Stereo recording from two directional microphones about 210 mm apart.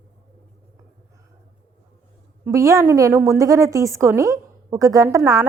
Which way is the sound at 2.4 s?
15° right (ahead or behind).